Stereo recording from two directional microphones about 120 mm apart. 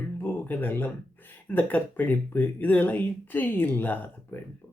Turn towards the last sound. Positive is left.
turn(degrees=15)  # may be behind; listen again after turning